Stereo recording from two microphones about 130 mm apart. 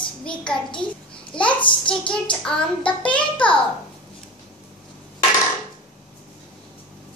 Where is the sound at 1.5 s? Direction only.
40° left (ahead or behind).